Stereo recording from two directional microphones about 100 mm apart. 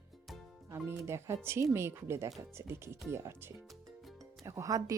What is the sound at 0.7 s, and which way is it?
Speech, 25° right (ahead or behind).